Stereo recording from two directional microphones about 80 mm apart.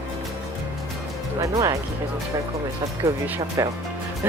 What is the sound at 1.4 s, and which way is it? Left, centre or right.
Speech, right.